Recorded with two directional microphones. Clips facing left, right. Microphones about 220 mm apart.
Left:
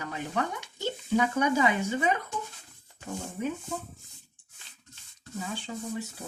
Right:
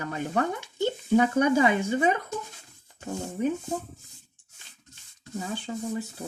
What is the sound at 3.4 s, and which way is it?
Speech, 35° right (ahead or behind).